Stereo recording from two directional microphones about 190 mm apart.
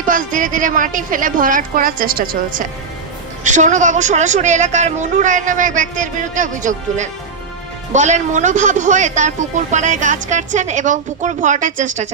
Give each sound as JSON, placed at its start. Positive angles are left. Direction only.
{"t": 0.0, "sound": "speech", "side_deg": -45}